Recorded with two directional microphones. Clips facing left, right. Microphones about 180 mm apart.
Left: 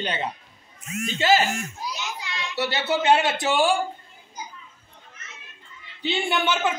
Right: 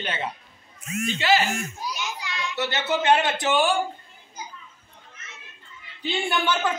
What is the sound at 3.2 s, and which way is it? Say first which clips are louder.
Speech: left 1 dB; 10° left (ahead or behind).